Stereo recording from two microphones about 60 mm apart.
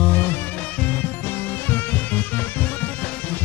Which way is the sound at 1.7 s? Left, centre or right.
Left.